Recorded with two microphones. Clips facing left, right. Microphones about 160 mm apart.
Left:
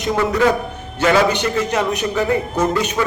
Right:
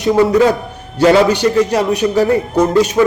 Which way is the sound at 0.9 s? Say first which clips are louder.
Right 5 dB; 35° right (ahead or behind).